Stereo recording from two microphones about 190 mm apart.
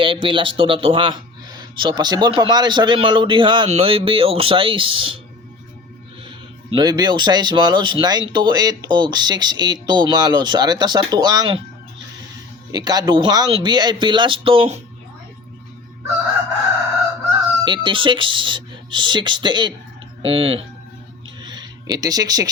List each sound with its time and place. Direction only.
0.0 s speech: 25° right (ahead or behind)
6.7 s speech: 20° right (ahead or behind)
12.7 s speech: 20° right (ahead or behind)
17.7 s speech: 25° right (ahead or behind)
21.4 s a sound: 20° right (ahead or behind)